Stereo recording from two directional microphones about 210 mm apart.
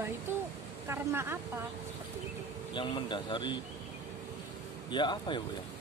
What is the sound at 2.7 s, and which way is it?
Speech, 25° left (ahead or behind).